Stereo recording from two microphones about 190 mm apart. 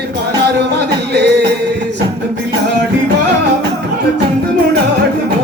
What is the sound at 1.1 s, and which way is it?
Music, 60° right (ahead or behind).